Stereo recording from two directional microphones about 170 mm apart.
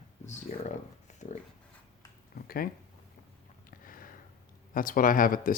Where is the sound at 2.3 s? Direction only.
60° left (ahead or behind).